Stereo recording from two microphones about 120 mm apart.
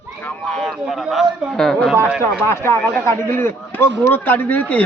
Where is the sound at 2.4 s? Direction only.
20° left (ahead or behind).